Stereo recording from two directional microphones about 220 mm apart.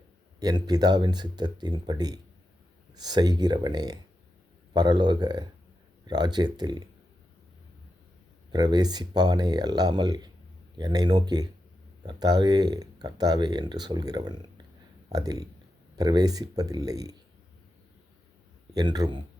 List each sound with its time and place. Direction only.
0.3 s speech: 20° right (ahead or behind)
8.5 s speech: 20° right (ahead or behind)
18.7 s speech: 20° right (ahead or behind)